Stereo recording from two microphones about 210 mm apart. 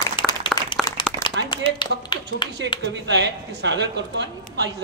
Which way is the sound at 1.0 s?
25° left (ahead or behind).